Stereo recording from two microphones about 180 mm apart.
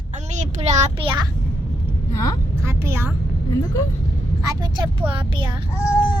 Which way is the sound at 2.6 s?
15° right (ahead or behind).